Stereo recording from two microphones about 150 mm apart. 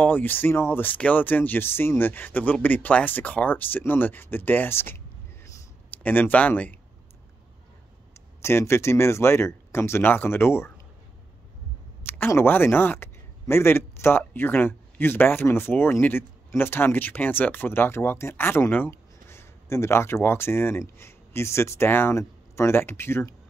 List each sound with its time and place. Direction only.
0.0 s speech: 10° left (ahead or behind)
8.4 s speech: 15° left (ahead or behind)
12.1 s speech: 15° left (ahead or behind)